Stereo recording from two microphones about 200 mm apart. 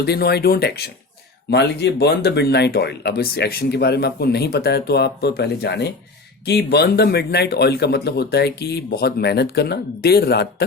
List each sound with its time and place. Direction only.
0.0 s speech: 55° left (ahead or behind)